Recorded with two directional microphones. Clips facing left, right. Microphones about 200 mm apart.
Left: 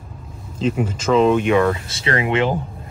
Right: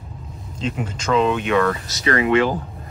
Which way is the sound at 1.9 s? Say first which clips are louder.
Right 2 dB; 25° left (ahead or behind).